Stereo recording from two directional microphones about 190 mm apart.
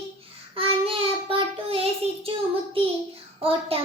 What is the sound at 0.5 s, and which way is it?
Child singing, 30° right (ahead or behind).